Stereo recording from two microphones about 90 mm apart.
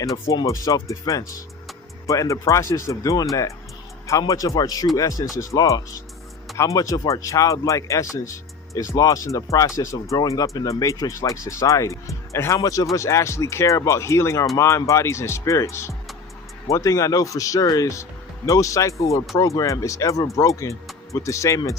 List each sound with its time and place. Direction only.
0.0 s speech: 40° left (ahead or behind)
4.3 s speech: 40° left (ahead or behind)